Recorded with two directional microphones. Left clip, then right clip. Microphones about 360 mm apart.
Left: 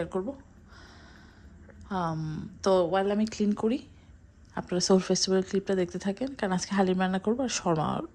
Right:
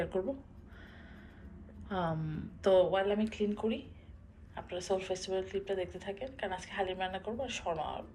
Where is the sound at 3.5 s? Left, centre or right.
Left.